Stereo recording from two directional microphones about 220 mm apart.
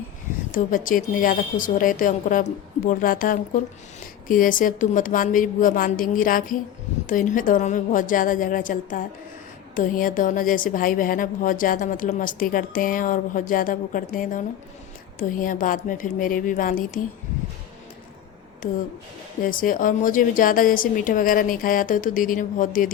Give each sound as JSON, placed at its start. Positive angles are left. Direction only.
{"t": 0.5, "sound": "speech", "side_deg": 40}
{"t": 19.4, "sound": "speech", "side_deg": 40}